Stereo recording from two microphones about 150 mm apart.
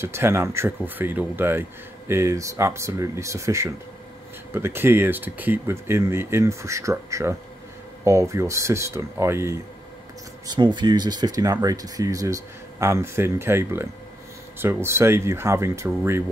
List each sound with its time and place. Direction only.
0.0 s speech: 15° right (ahead or behind)
10.4 s speech: 30° right (ahead or behind)